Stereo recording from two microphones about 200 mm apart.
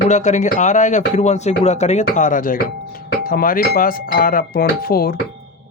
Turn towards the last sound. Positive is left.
turn(degrees=50)  # may be behind; listen again after turning